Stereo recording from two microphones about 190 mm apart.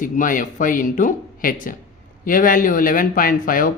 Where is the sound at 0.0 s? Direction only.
45° left (ahead or behind).